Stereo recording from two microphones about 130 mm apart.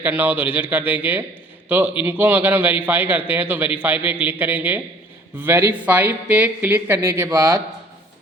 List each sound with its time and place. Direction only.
0.0 s a man's voice: 15° right (ahead or behind)
2.0 s a man's voice: 15° right (ahead or behind)